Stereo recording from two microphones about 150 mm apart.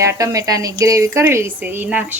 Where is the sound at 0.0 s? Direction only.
20° right (ahead or behind).